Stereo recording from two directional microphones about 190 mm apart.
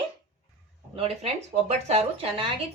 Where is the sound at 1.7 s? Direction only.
30° right (ahead or behind).